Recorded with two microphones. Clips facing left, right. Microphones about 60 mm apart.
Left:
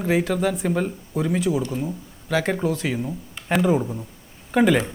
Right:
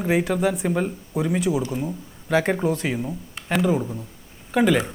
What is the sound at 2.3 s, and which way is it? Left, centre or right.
Speech, right.